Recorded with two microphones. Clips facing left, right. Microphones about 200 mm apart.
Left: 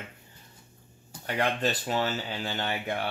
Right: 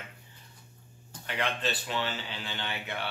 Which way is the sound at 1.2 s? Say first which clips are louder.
Left 5 dB; 45° left (ahead or behind).